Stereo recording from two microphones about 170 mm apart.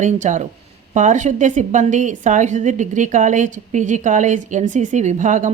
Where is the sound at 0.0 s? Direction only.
45° right (ahead or behind).